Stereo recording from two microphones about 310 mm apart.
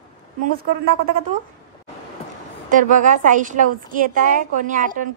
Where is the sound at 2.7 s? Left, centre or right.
Right.